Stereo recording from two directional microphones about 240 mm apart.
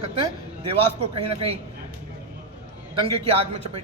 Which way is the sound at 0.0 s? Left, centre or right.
Right.